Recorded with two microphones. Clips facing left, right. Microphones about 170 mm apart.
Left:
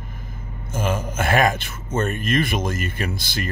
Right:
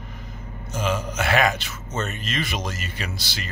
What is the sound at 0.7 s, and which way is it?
A man's voice, 50° left (ahead or behind).